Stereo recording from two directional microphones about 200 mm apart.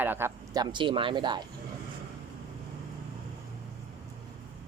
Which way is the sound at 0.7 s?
25° right (ahead or behind).